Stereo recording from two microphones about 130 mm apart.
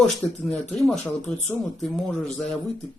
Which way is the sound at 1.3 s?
10° left (ahead or behind).